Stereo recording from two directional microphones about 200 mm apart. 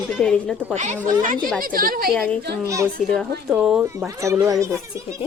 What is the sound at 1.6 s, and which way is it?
Speech, 45° right (ahead or behind).